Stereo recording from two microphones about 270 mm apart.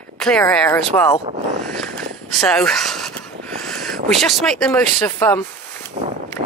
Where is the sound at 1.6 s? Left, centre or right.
Centre.